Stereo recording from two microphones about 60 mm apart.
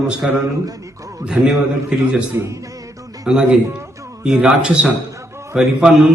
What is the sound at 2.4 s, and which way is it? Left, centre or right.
Speech, right.